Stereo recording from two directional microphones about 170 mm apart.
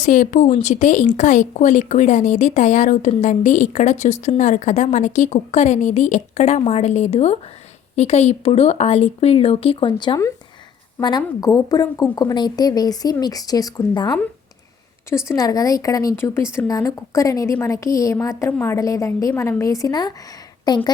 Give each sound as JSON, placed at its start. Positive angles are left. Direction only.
{"t": 0.0, "sound": "a woman's voice", "side_deg": 50}
{"t": 15.3, "sound": "a woman's voice", "side_deg": 20}